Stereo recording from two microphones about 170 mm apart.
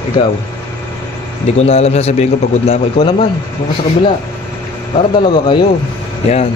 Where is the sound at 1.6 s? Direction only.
35° left (ahead or behind).